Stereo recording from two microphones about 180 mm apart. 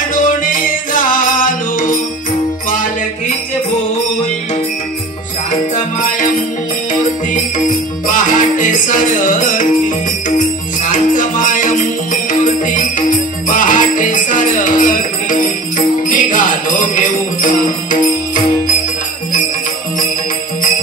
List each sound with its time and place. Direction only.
0.1 s music: 50° left (ahead or behind)
5.8 s music: 45° left (ahead or behind)
7.5 s music: 45° left (ahead or behind)